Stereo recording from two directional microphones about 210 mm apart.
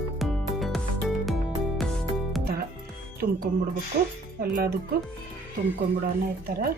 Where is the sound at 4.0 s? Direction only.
45° right (ahead or behind).